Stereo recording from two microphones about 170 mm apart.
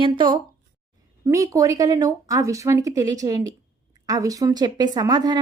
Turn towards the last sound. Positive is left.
turn(degrees=-20)  # may be behind; listen again after turning